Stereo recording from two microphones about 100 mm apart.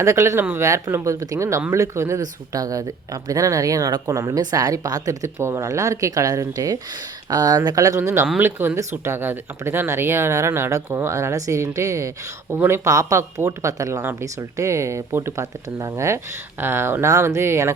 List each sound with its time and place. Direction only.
0.0 s speech: 30° right (ahead or behind)